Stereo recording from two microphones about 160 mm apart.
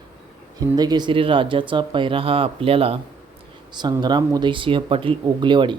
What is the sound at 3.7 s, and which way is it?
Speech, 25° right (ahead or behind).